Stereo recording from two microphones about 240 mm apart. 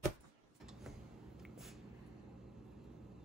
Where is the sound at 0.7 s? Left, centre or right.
Centre.